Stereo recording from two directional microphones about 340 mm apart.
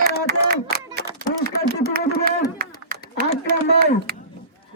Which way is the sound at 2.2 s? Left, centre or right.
Right.